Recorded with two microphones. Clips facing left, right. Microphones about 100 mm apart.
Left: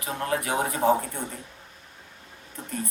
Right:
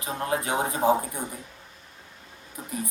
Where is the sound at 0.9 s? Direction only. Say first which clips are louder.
Even; 10° right (ahead or behind).